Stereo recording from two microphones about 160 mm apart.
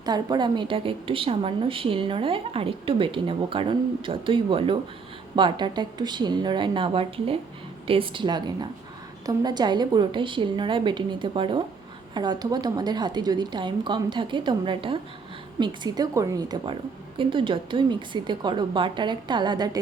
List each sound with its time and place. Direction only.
0.0 s a woman's voice: 25° right (ahead or behind)